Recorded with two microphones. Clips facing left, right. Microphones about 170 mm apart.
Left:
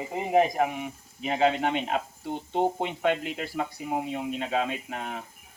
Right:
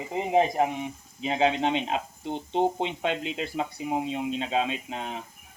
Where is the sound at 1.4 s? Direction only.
20° right (ahead or behind).